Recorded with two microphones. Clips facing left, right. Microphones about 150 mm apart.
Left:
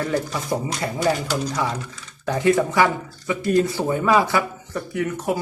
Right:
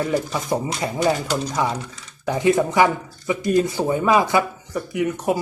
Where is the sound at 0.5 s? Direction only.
25° right (ahead or behind).